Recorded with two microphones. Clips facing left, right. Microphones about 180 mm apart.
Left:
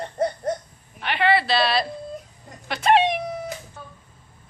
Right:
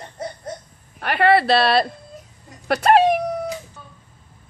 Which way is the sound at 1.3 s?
60° right (ahead or behind).